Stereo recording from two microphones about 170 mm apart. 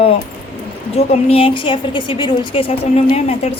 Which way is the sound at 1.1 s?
35° left (ahead or behind).